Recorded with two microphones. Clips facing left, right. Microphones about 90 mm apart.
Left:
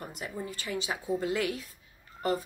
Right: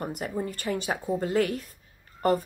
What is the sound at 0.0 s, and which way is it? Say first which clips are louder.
Speech: right 7 dB; 50° right (ahead or behind).